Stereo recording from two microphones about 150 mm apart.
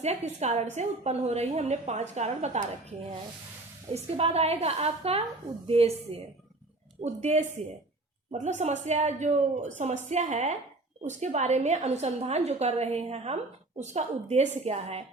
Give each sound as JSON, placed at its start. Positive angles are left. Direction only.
{"t": 0.0, "sound": "speech", "side_deg": -50}
{"t": 3.9, "sound": "a woman's voice", "side_deg": -45}